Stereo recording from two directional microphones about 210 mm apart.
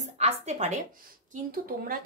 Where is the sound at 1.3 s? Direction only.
45° right (ahead or behind).